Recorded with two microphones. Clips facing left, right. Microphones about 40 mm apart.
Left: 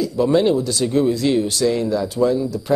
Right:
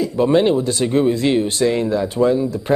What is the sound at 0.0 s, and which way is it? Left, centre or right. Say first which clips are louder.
Speech: right 1 dB; right.